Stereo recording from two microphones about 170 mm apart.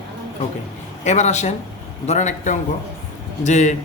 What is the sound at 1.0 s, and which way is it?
A man's voice, 40° left (ahead or behind).